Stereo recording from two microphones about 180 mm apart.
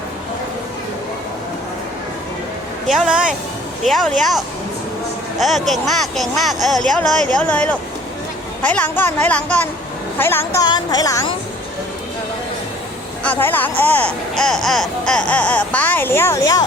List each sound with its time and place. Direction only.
2.8 s speech: centre (ahead or behind); by 11.3 s 20° left (ahead or behind)
13.2 s speech: 10° left (ahead or behind)